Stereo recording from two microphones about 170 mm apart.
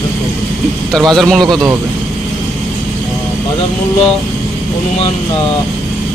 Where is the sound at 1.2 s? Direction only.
Centre (ahead or behind).